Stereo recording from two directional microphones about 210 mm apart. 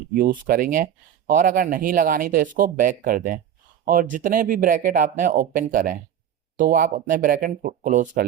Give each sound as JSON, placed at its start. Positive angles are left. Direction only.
{"t": 0.1, "sound": "speech", "side_deg": -40}